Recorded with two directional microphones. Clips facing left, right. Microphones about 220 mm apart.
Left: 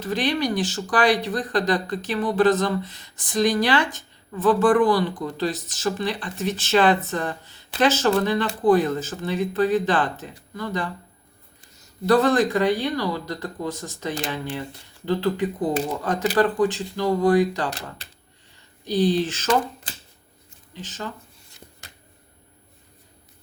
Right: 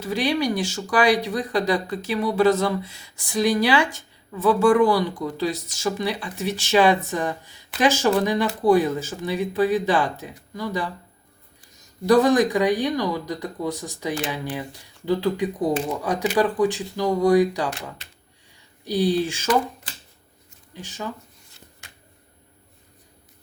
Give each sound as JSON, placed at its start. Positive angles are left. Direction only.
{"t": 0.0, "sound": "speech", "side_deg": -10}
{"t": 12.0, "sound": "speech", "side_deg": -15}
{"t": 17.7, "sound": "speech", "side_deg": 35}
{"t": 18.9, "sound": "speech", "side_deg": -10}
{"t": 20.7, "sound": "speech", "side_deg": -15}
{"t": 21.8, "sound": "a sound", "side_deg": 40}